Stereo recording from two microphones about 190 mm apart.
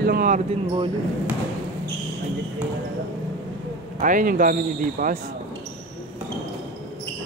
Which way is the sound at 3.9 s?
45° right (ahead or behind).